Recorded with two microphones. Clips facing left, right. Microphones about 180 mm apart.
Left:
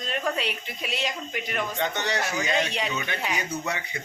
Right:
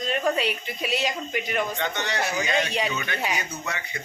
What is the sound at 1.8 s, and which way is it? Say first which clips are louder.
Speech: left 1 dB; 40° left (ahead or behind).